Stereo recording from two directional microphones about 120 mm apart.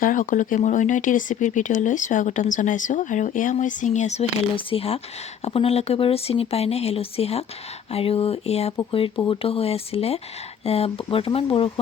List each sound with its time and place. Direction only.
0.1 s speech: 90° left; by 4.3 s 70° left (ahead or behind)
4.5 s speech: 50° left (ahead or behind)
8.9 s speech: 45° left (ahead or behind)